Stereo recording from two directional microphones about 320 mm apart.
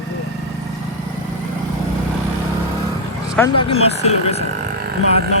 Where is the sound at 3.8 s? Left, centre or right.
Centre.